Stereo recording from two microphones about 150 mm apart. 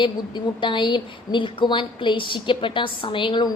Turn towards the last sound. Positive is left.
turn(degrees=30)  # may be behind; listen again after turning